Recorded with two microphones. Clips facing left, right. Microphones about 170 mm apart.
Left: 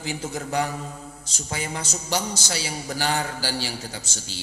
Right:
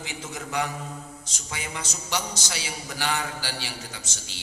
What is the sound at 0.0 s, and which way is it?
A man's voice, 35° left (ahead or behind).